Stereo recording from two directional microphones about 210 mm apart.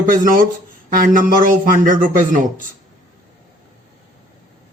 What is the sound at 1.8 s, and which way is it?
Speech, 40° right (ahead or behind).